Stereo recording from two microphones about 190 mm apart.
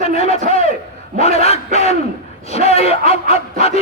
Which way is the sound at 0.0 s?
35° left (ahead or behind).